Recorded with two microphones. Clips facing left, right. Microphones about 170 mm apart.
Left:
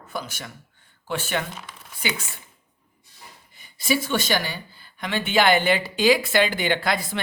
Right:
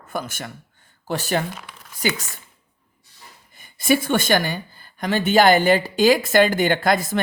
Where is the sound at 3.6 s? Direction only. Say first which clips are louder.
Right 5 dB; 50° right (ahead or behind).